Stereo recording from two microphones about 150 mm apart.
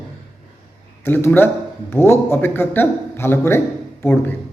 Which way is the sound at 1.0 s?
15° left (ahead or behind).